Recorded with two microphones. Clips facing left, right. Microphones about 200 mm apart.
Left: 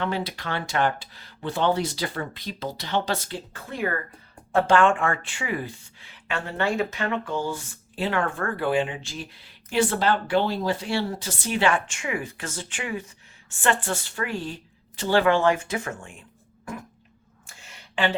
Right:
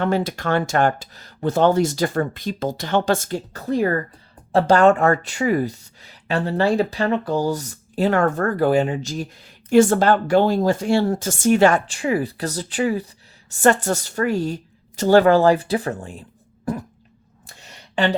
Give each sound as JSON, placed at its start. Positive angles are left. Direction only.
{"t": 0.0, "sound": "speech", "side_deg": -45}
{"t": 16.7, "sound": "fart", "side_deg": -35}
{"t": 17.4, "sound": "a sound", "side_deg": -40}